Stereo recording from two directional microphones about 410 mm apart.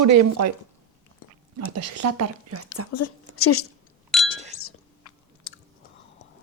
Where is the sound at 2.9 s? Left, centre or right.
Left.